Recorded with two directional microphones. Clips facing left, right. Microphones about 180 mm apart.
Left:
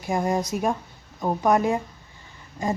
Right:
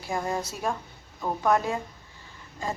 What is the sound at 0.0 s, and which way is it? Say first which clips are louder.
A woman's voice: left 5 dB; 20° left (ahead or behind).